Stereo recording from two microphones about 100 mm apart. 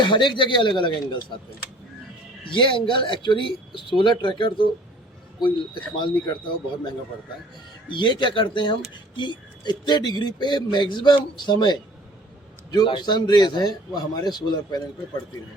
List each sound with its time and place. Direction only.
0.0 s speech: 50° left (ahead or behind)
2.5 s speech: 55° left (ahead or behind)
7.9 s speech: 55° left (ahead or behind)